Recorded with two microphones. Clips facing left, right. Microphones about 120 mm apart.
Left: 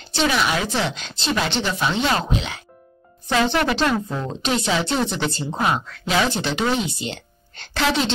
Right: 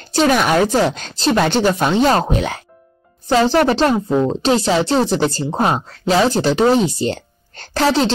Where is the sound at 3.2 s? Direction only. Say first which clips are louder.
Right 6 dB; 35° right (ahead or behind).